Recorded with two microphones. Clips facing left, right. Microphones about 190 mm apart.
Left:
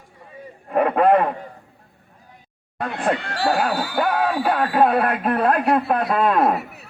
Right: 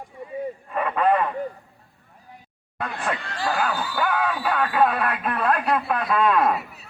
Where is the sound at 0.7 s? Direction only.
55° left (ahead or behind).